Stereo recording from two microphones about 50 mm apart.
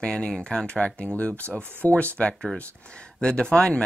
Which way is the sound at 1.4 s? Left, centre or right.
Right.